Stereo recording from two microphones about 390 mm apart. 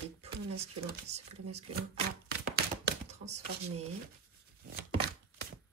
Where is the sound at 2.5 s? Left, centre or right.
Centre.